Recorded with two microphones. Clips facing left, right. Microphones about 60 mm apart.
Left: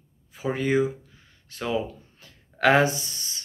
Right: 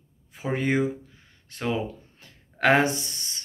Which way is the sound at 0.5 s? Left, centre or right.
Right.